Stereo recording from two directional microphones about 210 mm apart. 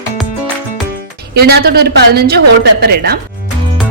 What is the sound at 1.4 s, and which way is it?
Speech, 50° right (ahead or behind).